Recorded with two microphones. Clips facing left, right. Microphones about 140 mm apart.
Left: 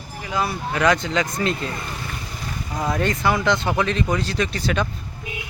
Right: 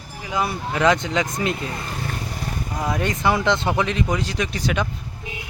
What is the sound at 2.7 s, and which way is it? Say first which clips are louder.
Speech: left 2 dB; 10° right (ahead or behind).